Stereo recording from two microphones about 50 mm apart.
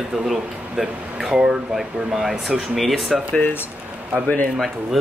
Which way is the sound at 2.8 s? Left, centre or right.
Centre.